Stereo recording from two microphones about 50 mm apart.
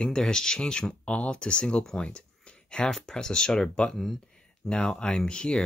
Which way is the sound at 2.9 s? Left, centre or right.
Centre.